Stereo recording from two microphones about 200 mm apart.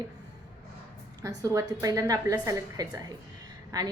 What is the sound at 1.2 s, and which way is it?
A woman's voice, 15° right (ahead or behind).